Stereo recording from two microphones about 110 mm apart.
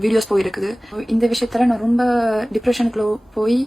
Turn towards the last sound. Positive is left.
turn(degrees=0)  # may be behind; listen again after turning